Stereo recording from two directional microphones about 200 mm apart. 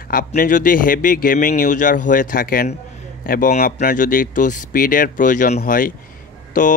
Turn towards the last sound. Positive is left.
turn(degrees=40)  # may be behind; listen again after turning